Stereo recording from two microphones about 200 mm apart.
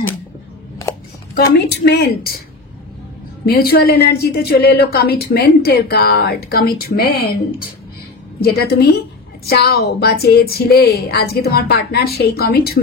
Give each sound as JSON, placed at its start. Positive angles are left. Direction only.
{"t": 1.7, "sound": "a woman's voice", "side_deg": 50}
{"t": 3.4, "sound": "a woman's voice", "side_deg": 50}
{"t": 8.4, "sound": "a woman's voice", "side_deg": 50}